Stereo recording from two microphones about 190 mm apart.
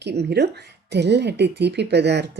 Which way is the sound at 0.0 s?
60° right (ahead or behind).